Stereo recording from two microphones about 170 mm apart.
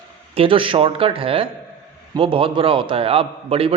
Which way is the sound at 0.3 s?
30° right (ahead or behind).